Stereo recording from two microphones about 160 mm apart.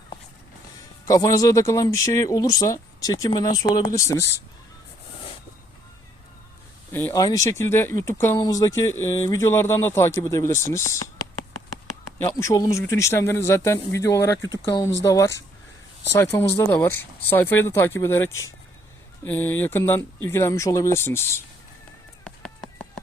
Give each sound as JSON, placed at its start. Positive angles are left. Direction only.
{"t": 1.0, "sound": "speech", "side_deg": 20}
{"t": 6.9, "sound": "speech", "side_deg": 20}
{"t": 12.4, "sound": "speech", "side_deg": 20}
{"t": 22.2, "sound": "a sound", "side_deg": 5}